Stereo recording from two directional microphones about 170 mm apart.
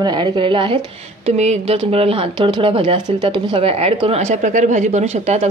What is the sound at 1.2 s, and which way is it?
Speech, 40° right (ahead or behind).